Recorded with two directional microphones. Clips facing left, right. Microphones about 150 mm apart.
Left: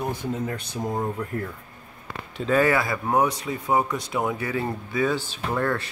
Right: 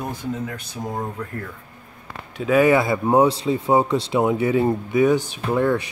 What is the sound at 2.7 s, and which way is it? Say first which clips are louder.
Speech: right 6 dB; 20° right (ahead or behind).